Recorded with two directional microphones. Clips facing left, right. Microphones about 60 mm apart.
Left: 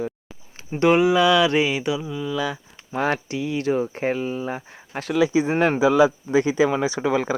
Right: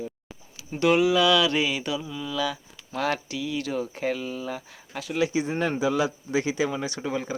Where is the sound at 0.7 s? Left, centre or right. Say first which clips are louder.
Left 4 dB; left.